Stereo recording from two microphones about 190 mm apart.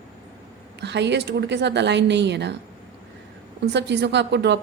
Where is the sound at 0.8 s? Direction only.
65° right (ahead or behind).